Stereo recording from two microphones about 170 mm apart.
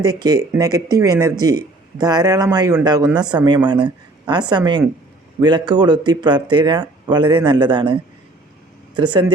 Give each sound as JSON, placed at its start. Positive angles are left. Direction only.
{"t": 0.0, "sound": "speech", "side_deg": -20}
{"t": 9.0, "sound": "speech", "side_deg": -30}